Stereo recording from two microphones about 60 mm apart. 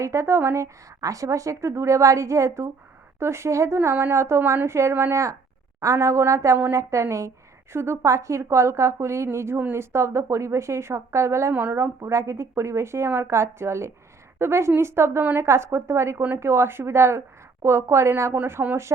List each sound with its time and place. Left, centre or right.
0.0 s a woman's voice: right
3.8 s a woman's voice: right
5.8 s a woman's voice: right
11.5 s speech: right
11.8 s a woman's voice: right